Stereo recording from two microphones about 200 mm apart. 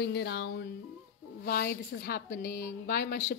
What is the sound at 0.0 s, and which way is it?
Speech, 55° left (ahead or behind).